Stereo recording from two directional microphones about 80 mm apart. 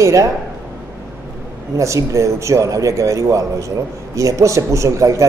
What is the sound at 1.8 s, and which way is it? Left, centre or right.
Speech, right.